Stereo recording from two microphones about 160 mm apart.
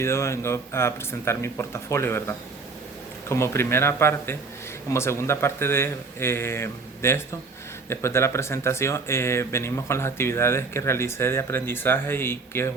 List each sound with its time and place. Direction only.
0.0 s speech: 15° left (ahead or behind)